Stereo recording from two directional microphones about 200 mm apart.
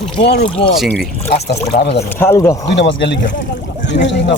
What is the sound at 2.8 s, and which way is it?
Speech, 60° left (ahead or behind).